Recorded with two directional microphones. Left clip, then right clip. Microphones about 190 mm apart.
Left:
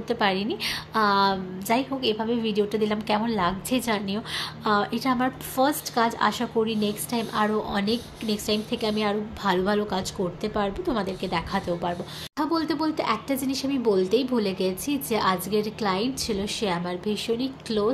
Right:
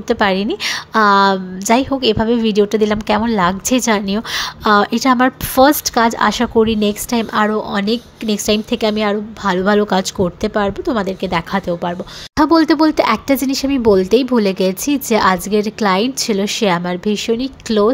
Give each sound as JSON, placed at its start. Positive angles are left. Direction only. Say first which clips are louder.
{"t": 0.1, "sound": "a woman's voice", "louder": "right 9 dB", "side_deg": -40}
{"t": 12.4, "sound": "a woman's voice", "louder": "right 14 dB", "side_deg": -45}